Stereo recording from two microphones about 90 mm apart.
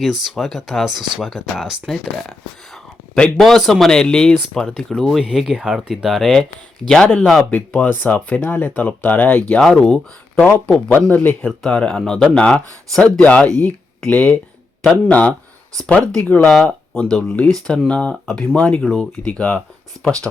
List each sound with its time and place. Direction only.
0.0 s speech: 5° right (ahead or behind)
3.2 s speech: 5° left (ahead or behind)
5.2 s speech: 5° right (ahead or behind); by 11.3 s 20° left (ahead or behind)
11.4 s speech: 10° left (ahead or behind)
16.9 s speech: 10° left (ahead or behind)